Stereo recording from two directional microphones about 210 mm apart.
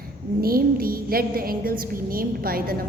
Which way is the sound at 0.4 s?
45° right (ahead or behind).